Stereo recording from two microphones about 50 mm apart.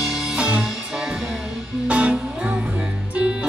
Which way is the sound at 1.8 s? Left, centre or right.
Right.